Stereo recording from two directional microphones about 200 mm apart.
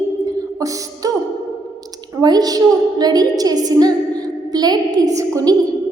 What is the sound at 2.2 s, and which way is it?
A woman's voice, 20° right (ahead or behind).